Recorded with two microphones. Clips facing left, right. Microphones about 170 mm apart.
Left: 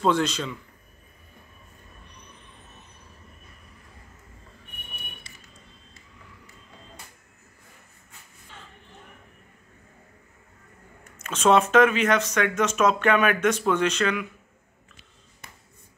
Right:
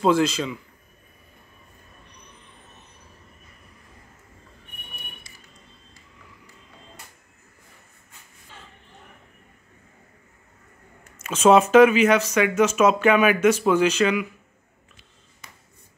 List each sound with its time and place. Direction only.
0.0 s speech: 5° right (ahead or behind)
11.1 s speech: 5° right (ahead or behind)
15.4 s music: 60° left (ahead or behind)